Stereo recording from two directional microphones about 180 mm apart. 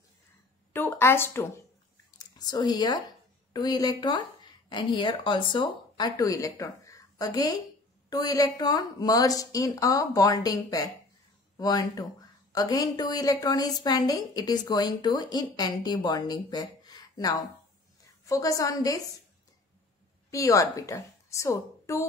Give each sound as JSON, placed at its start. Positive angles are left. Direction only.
{"t": 0.7, "sound": "a woman's voice", "side_deg": 10}
{"t": 2.0, "sound": "a sound", "side_deg": 20}
{"t": 3.5, "sound": "speech", "side_deg": 20}
{"t": 20.2, "sound": "a woman's voice", "side_deg": 20}